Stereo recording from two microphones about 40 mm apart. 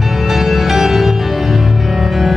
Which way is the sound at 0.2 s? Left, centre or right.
Centre.